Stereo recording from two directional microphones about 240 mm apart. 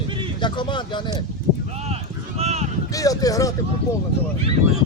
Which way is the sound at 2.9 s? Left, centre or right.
Centre.